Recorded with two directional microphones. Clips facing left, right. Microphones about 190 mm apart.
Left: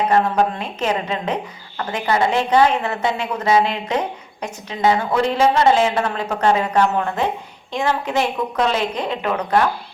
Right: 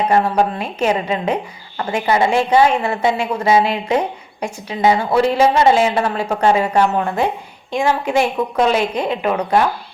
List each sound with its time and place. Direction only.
0.1 s a woman's voice: 10° right (ahead or behind)